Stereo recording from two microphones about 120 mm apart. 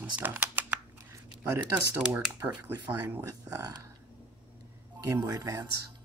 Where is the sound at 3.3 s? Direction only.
35° right (ahead or behind).